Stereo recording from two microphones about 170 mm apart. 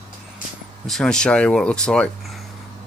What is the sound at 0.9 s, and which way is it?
Speech, 5° left (ahead or behind).